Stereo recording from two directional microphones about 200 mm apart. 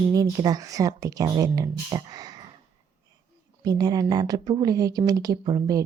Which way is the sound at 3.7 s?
20° right (ahead or behind).